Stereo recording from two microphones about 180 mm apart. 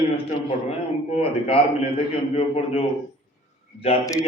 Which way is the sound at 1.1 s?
30° left (ahead or behind).